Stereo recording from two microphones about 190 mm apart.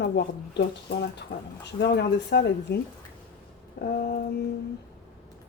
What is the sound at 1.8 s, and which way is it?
A woman's voice, 60° left (ahead or behind).